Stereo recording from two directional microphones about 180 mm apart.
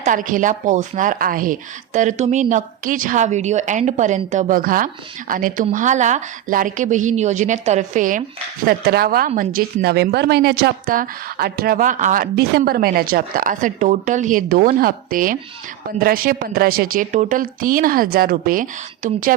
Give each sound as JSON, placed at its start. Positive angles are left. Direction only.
{"t": 0.0, "sound": "speech", "side_deg": -45}
{"t": 8.6, "sound": "speech", "side_deg": -60}